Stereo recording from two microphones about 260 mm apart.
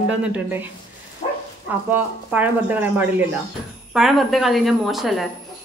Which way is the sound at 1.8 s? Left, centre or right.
Centre.